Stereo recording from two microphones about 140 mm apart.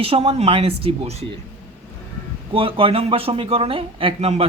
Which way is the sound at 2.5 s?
40° right (ahead or behind).